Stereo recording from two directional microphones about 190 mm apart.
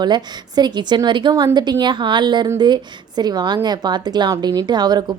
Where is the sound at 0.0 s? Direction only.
20° right (ahead or behind).